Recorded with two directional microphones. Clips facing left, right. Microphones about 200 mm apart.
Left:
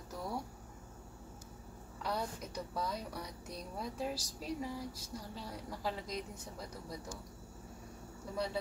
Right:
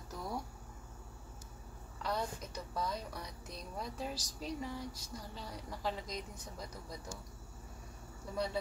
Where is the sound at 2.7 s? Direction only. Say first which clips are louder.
Right 1 dB; 10° left (ahead or behind).